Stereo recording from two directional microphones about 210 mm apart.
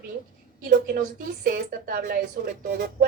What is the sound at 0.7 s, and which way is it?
A woman's voice, 40° right (ahead or behind).